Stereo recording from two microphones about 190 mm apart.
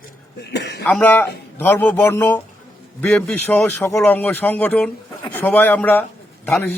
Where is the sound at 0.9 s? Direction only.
10° left (ahead or behind).